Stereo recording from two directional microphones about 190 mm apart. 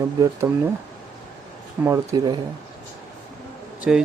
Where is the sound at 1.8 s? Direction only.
15° right (ahead or behind).